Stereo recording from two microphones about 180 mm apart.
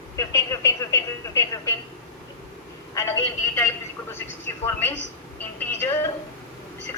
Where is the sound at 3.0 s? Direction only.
15° left (ahead or behind).